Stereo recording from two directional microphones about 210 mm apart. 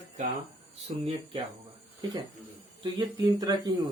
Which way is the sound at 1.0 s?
25° right (ahead or behind).